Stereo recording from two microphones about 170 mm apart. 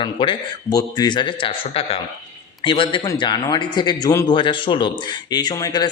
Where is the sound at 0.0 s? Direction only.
30° left (ahead or behind).